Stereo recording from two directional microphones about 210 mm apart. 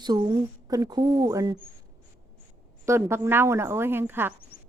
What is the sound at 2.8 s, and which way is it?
A woman's voice, 10° right (ahead or behind).